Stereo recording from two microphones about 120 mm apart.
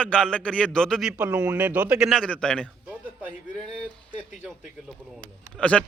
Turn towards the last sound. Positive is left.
turn(degrees=10)  # may be behind; listen again after turning